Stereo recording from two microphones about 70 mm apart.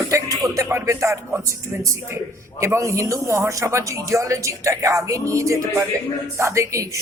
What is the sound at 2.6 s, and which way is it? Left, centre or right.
A man's voice, right.